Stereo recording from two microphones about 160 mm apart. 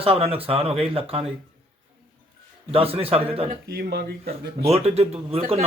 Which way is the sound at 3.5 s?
85° right.